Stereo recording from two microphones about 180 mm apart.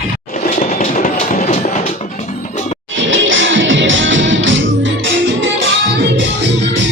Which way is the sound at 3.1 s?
90° right.